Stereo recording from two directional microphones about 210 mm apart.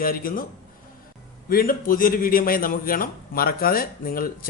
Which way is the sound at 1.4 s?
45° left (ahead or behind).